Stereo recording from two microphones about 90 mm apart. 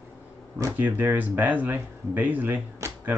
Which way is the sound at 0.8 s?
20° right (ahead or behind).